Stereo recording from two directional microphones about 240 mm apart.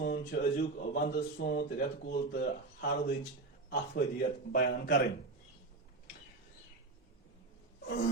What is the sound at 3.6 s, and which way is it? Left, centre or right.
Speech, left.